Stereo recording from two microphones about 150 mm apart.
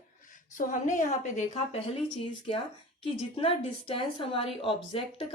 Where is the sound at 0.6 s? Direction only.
60° left (ahead or behind).